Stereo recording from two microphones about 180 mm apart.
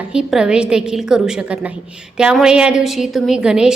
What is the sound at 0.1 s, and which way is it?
A woman's voice, 5° right (ahead or behind).